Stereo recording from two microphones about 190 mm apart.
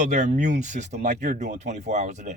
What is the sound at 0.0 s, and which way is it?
A man's voice, 40° right (ahead or behind).